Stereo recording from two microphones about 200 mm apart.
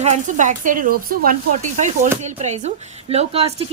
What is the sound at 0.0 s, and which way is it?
A woman's voice, 35° right (ahead or behind).